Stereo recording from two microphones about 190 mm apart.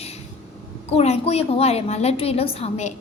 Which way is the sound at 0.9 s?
35° left (ahead or behind).